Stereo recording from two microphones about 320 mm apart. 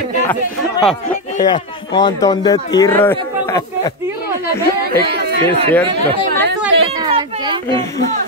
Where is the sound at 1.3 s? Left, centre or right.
Centre.